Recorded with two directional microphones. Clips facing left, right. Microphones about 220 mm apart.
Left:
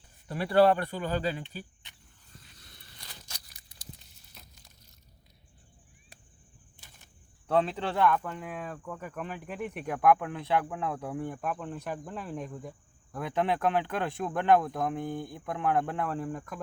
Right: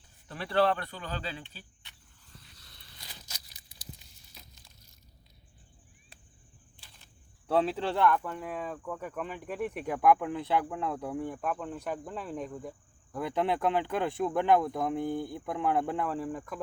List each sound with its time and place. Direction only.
0.3 s speech: 10° left (ahead or behind)
1.1 s speech: 45° left (ahead or behind)
1.5 s speech: 15° left (ahead or behind)
7.4 s speech: 5° right (ahead or behind)